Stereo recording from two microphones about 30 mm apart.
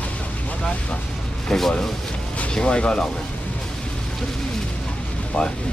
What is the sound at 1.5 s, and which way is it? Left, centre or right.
Speech, centre.